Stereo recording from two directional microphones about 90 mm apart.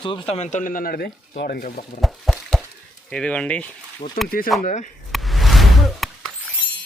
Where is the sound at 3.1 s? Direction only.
10° left (ahead or behind).